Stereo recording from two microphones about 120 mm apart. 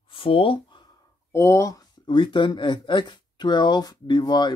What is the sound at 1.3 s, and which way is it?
Speech, 25° left (ahead or behind).